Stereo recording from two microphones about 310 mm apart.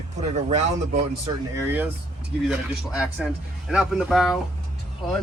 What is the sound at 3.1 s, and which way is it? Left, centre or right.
Speech, centre.